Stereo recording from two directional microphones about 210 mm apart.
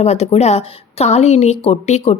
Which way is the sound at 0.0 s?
30° left (ahead or behind).